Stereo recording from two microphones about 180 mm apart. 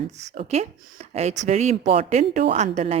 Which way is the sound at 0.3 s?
40° right (ahead or behind).